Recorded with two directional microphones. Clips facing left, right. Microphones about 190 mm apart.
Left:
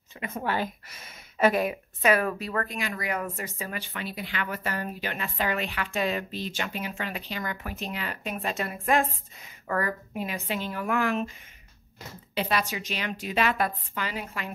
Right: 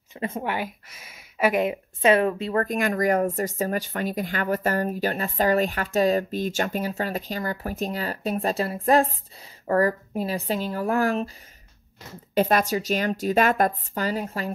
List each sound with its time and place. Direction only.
0.4 s speech: 15° right (ahead or behind)
0.8 s a sound: 5° right (ahead or behind)
1.5 s speech: 20° right (ahead or behind)
2.6 s speech: 50° right (ahead or behind)
12.4 s speech: 45° right (ahead or behind)